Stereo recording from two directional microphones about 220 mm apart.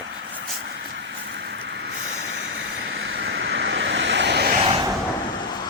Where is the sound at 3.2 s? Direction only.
55° right (ahead or behind).